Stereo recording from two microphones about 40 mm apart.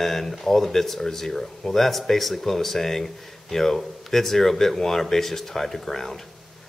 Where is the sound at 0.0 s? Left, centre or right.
Centre.